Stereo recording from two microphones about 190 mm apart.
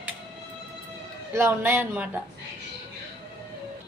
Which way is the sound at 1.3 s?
10° right (ahead or behind).